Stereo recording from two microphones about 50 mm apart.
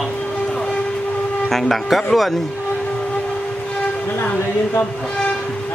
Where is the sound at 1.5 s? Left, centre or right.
Centre.